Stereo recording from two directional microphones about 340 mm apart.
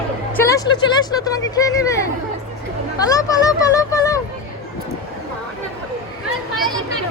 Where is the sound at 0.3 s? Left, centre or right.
Centre.